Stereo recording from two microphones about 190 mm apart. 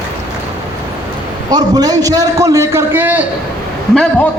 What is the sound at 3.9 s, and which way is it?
Speech, 5° left (ahead or behind).